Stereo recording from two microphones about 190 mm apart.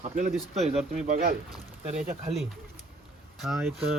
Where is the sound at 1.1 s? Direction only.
40° right (ahead or behind).